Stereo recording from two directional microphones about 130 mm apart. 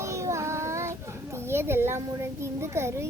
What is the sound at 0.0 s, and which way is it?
Child singing, 25° right (ahead or behind).